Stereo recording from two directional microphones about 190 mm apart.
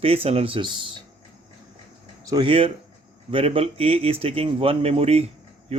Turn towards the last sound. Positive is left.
turn(degrees=-30)  # may be behind; listen again after turning